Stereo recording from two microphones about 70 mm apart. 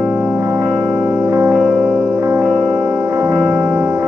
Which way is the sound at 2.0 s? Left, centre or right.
Right.